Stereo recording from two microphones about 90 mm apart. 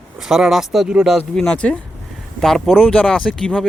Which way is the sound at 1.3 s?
10° left (ahead or behind).